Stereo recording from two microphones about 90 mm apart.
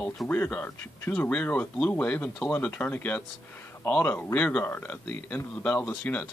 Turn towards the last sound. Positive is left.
turn(degrees=15)  # may be behind; listen again after turning